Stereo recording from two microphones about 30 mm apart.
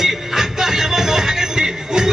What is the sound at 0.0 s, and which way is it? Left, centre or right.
Music, centre.